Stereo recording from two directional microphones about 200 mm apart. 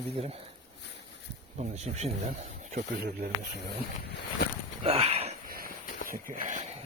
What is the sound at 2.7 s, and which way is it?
Speech, 50° right (ahead or behind).